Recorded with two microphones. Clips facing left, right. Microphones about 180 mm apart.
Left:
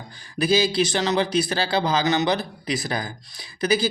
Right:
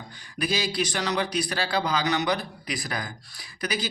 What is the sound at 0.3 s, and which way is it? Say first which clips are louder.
A man's voice: left 7 dB; 25° left (ahead or behind).